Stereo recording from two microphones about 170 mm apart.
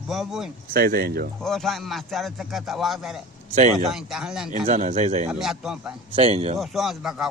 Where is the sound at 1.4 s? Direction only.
Centre (ahead or behind).